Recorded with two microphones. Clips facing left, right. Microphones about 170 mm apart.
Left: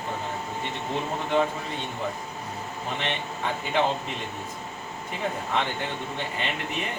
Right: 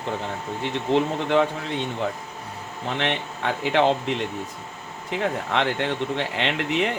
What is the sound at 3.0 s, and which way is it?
Speech, 80° right.